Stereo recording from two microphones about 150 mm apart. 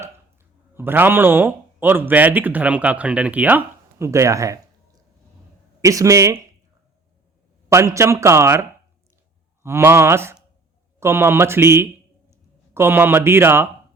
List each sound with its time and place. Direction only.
0.7 s speech: 15° right (ahead or behind)
5.8 s speech: 20° right (ahead or behind)
7.7 s speech: 20° right (ahead or behind)
9.6 s a man's voice: 15° right (ahead or behind)